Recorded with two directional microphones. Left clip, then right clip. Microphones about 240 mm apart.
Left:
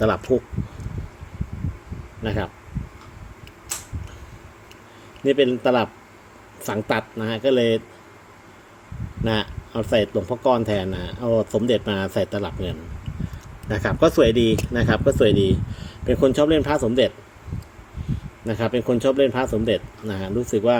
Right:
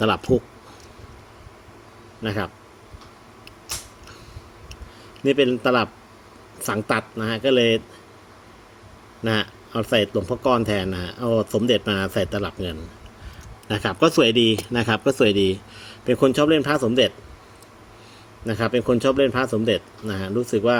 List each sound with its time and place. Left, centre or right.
0.0 s speech: centre
2.2 s speech: centre
5.2 s speech: centre
9.2 s speech: centre
18.4 s speech: centre